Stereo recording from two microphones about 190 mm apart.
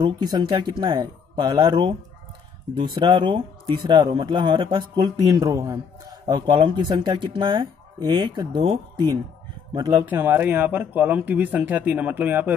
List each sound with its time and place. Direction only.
0.0 s speech: 25° right (ahead or behind)
10.0 s speech: 10° right (ahead or behind)